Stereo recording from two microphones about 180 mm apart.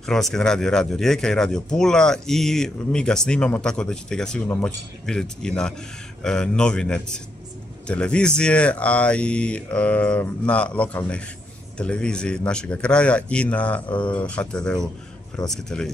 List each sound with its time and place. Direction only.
0.0 s speech: 5° left (ahead or behind)